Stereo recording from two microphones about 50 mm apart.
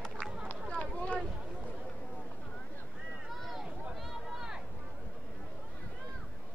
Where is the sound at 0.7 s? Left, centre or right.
Left.